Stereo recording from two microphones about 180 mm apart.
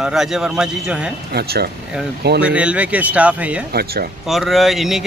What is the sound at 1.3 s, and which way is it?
Speech, 60° right (ahead or behind).